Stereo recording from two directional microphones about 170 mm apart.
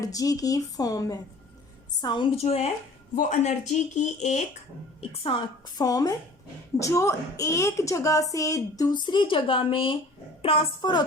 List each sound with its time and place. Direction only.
0.0 s a woman's voice: 20° left (ahead or behind); by 4.4 s 45° left (ahead or behind)
5.2 s a woman's voice: 30° left (ahead or behind)